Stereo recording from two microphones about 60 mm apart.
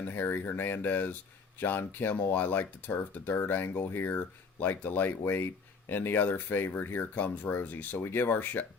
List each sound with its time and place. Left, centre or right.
0.0 s speech: left